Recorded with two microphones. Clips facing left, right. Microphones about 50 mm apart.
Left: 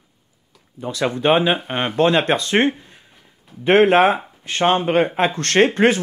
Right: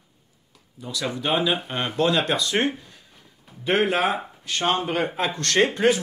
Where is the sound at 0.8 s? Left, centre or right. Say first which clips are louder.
Left 8 dB; left.